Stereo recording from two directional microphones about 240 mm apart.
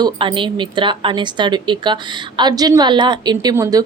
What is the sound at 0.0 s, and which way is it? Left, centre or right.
A woman's voice, centre.